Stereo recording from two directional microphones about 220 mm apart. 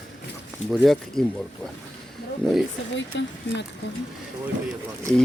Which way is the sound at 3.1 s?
55° left (ahead or behind).